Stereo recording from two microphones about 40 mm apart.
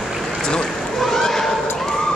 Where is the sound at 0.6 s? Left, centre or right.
Centre.